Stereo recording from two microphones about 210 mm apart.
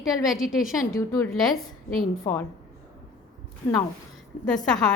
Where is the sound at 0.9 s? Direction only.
15° left (ahead or behind).